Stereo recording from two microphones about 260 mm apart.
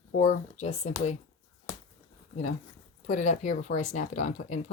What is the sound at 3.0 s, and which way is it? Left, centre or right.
Speech, left.